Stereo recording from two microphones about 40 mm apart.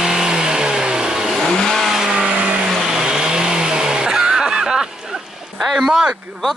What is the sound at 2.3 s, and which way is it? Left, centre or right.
Vehicle, right.